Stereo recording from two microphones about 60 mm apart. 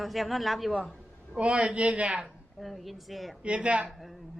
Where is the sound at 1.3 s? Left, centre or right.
Centre.